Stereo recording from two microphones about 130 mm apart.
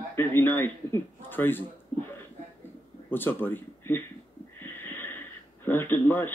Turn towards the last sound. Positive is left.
turn(degrees=15)  # may be behind; listen again after turning